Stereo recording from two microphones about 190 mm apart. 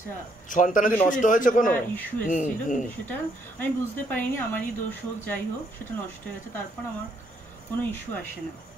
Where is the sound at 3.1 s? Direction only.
10° left (ahead or behind).